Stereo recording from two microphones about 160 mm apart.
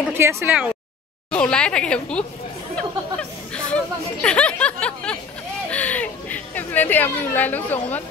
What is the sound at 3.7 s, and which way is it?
Music, 5° left (ahead or behind).